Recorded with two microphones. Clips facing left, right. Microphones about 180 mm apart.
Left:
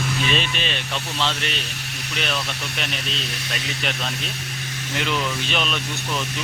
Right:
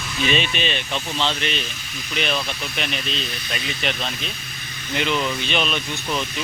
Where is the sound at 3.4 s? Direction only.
75° left (ahead or behind).